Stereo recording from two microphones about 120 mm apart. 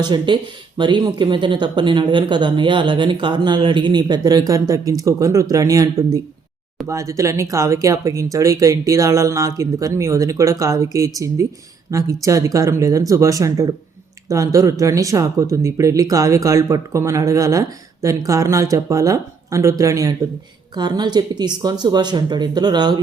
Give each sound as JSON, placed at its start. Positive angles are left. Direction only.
{"t": 0.0, "sound": "a woman's voice", "side_deg": -40}